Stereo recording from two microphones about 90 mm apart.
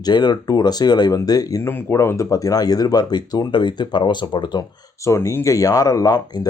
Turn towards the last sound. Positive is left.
turn(degrees=40)  # may be behind; listen again after turning